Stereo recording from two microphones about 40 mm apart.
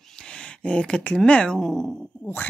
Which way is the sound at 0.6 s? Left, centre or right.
Left.